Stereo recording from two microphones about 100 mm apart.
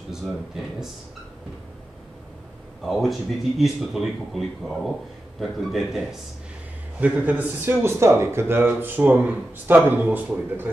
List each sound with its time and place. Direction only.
0.1 s a man's voice: 5° right (ahead or behind)
2.8 s a man's voice: centre (ahead or behind)
7.0 s speech: 15° right (ahead or behind)